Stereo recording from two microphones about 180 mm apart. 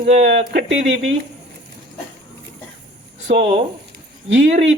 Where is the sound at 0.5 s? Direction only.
90° right.